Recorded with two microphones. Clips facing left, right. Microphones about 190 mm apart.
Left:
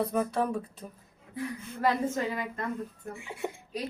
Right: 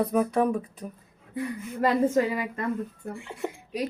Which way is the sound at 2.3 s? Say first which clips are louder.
Right 4 dB; 10° right (ahead or behind).